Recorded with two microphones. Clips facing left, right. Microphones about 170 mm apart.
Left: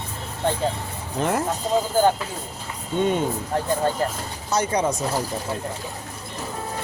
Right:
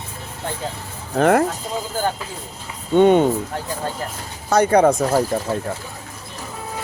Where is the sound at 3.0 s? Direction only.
60° right (ahead or behind).